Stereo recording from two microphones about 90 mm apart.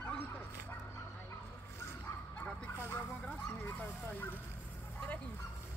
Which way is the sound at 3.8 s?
20° left (ahead or behind).